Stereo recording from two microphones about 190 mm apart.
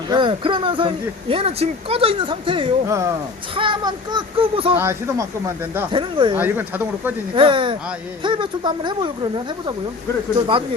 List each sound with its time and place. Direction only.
0.1 s speech: 25° right (ahead or behind)
2.8 s speech: 15° right (ahead or behind)
3.5 s speech: 25° right (ahead or behind)
4.8 s speech: 15° right (ahead or behind)
5.9 s speech: 25° right (ahead or behind)
6.3 s speech: 10° right (ahead or behind)
7.3 s speech: 25° right (ahead or behind)